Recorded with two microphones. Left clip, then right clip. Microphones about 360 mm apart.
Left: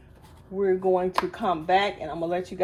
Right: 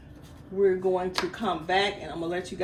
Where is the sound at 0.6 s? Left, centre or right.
Centre.